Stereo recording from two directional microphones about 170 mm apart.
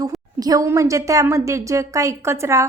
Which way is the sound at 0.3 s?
20° right (ahead or behind).